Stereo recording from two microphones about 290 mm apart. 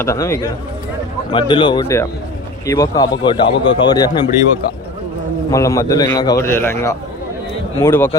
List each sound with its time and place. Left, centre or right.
0.0 s speech: centre
5.5 s speech: centre